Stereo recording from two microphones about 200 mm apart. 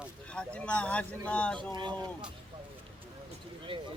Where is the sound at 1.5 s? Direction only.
25° right (ahead or behind).